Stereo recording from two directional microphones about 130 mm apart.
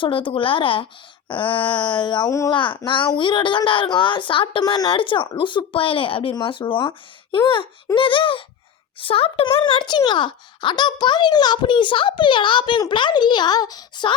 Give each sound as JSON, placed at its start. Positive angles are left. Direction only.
{"t": 0.0, "sound": "a child's voice", "side_deg": 40}
{"t": 2.5, "sound": "a child's voice", "side_deg": 40}